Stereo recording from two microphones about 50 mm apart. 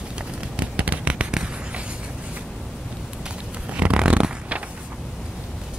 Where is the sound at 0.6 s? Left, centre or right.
Right.